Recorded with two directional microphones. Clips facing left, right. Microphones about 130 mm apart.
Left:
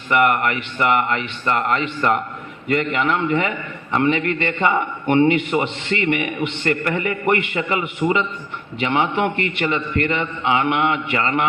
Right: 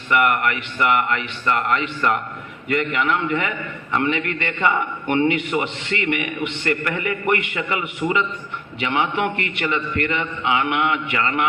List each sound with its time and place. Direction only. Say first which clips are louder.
0.1 s a man's voice: left 2 dB; 30° left (ahead or behind)